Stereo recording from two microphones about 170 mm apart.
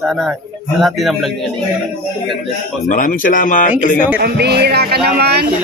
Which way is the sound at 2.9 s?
55° left (ahead or behind).